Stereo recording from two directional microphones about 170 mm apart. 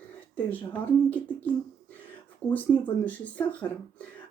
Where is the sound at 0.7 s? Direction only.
10° left (ahead or behind).